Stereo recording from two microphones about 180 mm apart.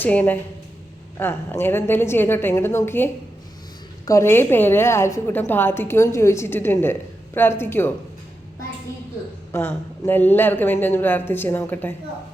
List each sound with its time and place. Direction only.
0.0 s a woman's voice: 10° left (ahead or behind)
9.5 s a woman's voice: 15° left (ahead or behind)